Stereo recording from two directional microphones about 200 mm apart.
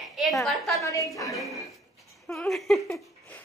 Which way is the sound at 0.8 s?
15° left (ahead or behind).